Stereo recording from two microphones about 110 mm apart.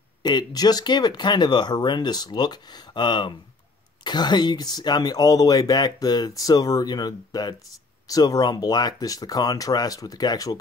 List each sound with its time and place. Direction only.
0.2 s speech: 40° left (ahead or behind)